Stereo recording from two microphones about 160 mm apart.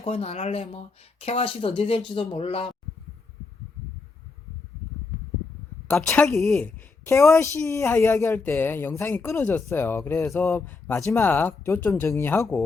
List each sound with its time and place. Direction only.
0.0 s speech: 40° left (ahead or behind)
6.6 s a woman's voice: 15° left (ahead or behind)